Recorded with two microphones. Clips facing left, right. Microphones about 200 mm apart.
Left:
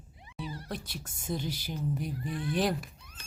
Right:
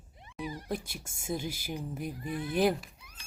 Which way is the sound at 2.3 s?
20° right (ahead or behind).